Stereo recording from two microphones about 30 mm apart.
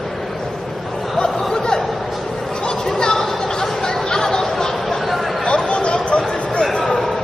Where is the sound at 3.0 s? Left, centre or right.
Centre.